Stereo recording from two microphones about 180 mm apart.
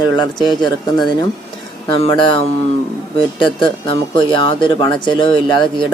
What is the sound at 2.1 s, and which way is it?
Speech, 25° left (ahead or behind).